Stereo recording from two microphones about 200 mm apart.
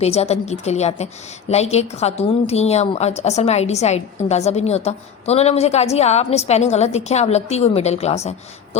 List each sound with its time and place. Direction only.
0.0 s a woman's voice: 30° left (ahead or behind)